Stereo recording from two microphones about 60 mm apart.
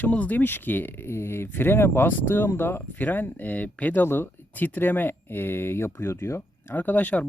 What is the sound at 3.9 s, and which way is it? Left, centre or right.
Speech, left.